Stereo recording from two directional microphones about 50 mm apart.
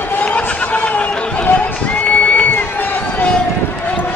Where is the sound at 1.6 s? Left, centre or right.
Left.